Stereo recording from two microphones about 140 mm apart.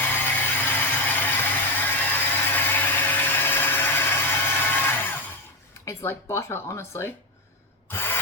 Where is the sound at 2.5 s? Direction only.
15° left (ahead or behind).